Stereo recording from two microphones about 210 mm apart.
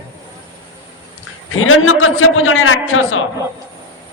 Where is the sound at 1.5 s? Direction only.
80° left.